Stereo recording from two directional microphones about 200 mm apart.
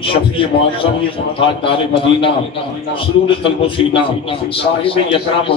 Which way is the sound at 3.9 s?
25° left (ahead or behind).